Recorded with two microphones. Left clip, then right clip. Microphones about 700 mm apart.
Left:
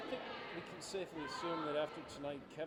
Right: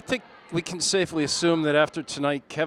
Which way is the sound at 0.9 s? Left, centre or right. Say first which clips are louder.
Right 19 dB; right.